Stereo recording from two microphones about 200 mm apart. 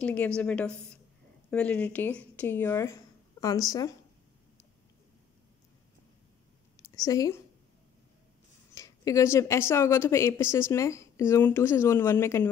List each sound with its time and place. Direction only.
0.0 s a woman's voice: 5° left (ahead or behind)
6.8 s a sound: 15° left (ahead or behind)
8.7 s a woman's voice: 15° left (ahead or behind)